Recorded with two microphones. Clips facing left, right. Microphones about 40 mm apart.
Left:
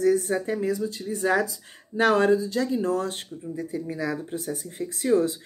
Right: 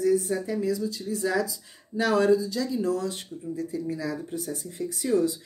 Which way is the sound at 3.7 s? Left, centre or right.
Left.